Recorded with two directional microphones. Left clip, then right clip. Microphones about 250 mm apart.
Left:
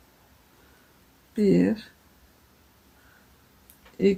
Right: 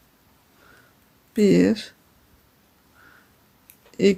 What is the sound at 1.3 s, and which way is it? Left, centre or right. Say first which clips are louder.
Speech: right 4 dB; right.